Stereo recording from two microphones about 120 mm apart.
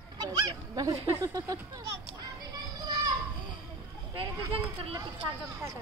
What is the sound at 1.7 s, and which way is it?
Children playing, 35° right (ahead or behind).